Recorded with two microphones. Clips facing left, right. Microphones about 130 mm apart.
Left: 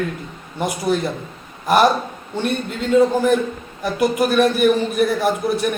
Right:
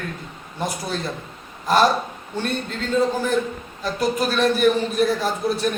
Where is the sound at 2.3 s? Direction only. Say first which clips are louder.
Left 3 dB; 15° left (ahead or behind).